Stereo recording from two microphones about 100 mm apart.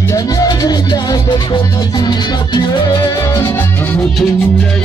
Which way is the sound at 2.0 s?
45° left (ahead or behind).